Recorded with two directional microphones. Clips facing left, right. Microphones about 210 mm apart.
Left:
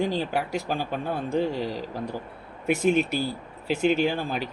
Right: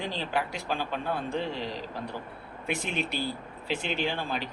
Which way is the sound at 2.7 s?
45° left (ahead or behind).